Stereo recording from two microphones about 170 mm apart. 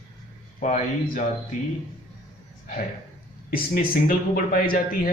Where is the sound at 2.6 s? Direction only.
50° left (ahead or behind).